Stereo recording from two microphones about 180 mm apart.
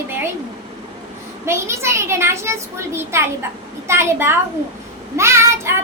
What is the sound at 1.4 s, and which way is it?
A child's voice, 15° right (ahead or behind).